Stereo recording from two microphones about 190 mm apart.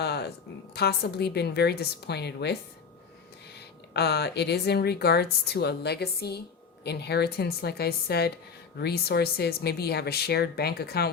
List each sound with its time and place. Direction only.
0.0 s a sound: 60° left (ahead or behind)
0.7 s speech: 60° left (ahead or behind)
3.9 s speech: 60° left (ahead or behind)